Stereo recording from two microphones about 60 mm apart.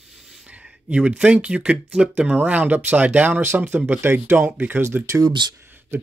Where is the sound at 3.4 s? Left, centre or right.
Right.